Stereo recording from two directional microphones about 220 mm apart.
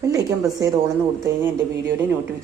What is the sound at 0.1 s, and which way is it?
Speech, 15° right (ahead or behind).